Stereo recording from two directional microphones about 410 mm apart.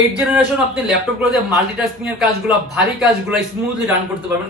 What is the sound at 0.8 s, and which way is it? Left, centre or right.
Speech, centre.